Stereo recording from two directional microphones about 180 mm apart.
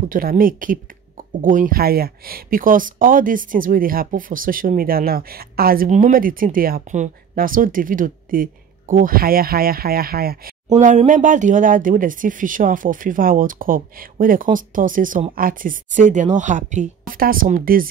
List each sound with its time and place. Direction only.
0.1 s speech: 50° right (ahead or behind)
10.7 s speech: 40° right (ahead or behind)